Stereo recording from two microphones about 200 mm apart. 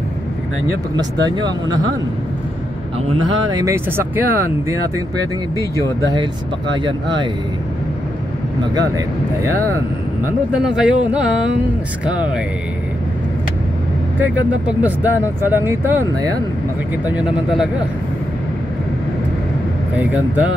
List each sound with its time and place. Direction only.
0.9 s speech: 20° right (ahead or behind)
3.1 s speech: 25° right (ahead or behind)
6.8 s speech: 25° right (ahead or behind)
8.7 s speech: 15° right (ahead or behind)
10.2 s speech: 5° right (ahead or behind)
14.2 s speech: 10° right (ahead or behind)
20.0 s speech: 5° right (ahead or behind)